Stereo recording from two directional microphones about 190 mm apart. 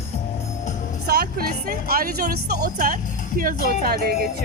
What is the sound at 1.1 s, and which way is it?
Speech, 55° right (ahead or behind).